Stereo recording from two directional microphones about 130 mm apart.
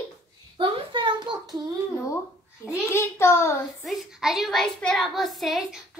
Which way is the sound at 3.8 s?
Centre (ahead or behind).